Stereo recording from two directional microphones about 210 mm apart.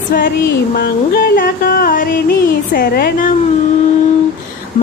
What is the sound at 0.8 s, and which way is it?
Music, 45° left (ahead or behind).